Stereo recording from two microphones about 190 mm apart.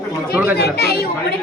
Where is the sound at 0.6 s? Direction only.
55° left (ahead or behind).